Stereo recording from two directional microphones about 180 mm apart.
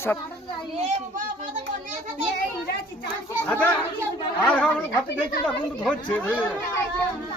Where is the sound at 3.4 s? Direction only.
10° left (ahead or behind).